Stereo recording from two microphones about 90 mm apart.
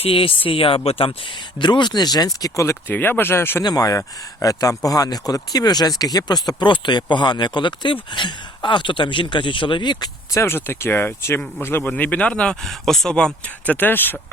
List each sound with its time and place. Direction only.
0.0 s speech: 90° left; by 2.6 s 45° left (ahead or behind)
2.6 s speech: 20° left (ahead or behind)
3.6 s speech: 45° left (ahead or behind)
10.3 s speech: 25° left (ahead or behind)